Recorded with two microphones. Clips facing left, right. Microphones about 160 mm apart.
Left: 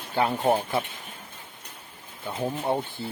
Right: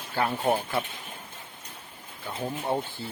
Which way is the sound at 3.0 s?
20° left (ahead or behind).